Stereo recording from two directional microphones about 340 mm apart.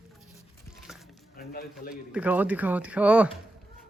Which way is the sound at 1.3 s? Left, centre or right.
Left.